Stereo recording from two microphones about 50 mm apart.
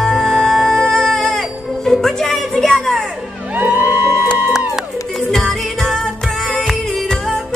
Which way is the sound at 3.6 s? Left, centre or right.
Right.